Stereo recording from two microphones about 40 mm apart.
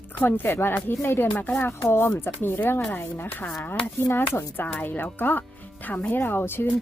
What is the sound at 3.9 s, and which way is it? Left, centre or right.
Speech, left.